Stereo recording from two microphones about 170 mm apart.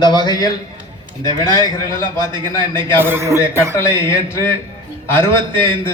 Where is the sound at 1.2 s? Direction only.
25° right (ahead or behind).